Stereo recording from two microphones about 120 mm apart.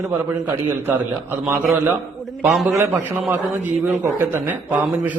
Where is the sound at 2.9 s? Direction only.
15° right (ahead or behind).